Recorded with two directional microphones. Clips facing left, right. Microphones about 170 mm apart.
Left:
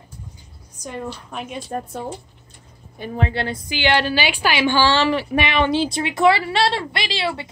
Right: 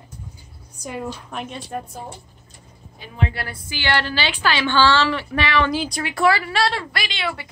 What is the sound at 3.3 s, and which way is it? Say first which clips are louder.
A woman's voice: left 7 dB; 25° left (ahead or behind).